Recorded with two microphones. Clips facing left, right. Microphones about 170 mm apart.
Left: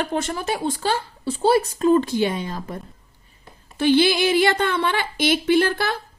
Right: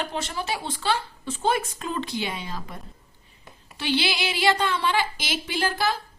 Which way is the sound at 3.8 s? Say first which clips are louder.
Left 9 dB; 50° left (ahead or behind).